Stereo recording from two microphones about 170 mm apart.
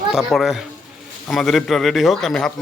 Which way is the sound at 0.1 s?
Centre (ahead or behind).